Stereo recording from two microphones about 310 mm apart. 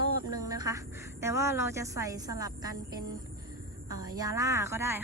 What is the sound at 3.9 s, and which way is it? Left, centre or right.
A woman's voice, centre.